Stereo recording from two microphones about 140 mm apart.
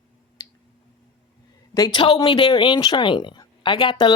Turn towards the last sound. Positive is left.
turn(degrees=35)  # may be behind; listen again after turning